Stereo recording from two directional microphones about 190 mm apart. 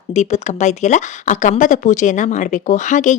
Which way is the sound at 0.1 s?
35° left (ahead or behind).